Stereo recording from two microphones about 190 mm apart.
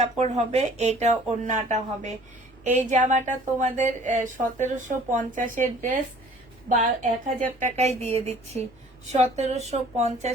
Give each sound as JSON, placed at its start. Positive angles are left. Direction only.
{"t": 0.0, "sound": "a woman's voice", "side_deg": -35}